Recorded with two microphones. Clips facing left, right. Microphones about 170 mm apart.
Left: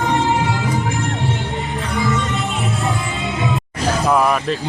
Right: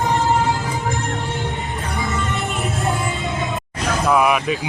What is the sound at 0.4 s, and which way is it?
Music, 40° right (ahead or behind).